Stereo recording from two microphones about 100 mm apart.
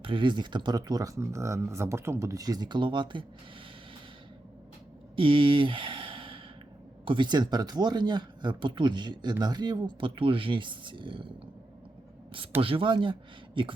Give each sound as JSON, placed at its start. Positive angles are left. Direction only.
{"t": 0.0, "sound": "speech", "side_deg": -55}
{"t": 0.8, "sound": "speech", "side_deg": -35}
{"t": 5.1, "sound": "a sound", "side_deg": -60}
{"t": 7.0, "sound": "speech", "side_deg": -55}
{"t": 12.6, "sound": "speech", "side_deg": -60}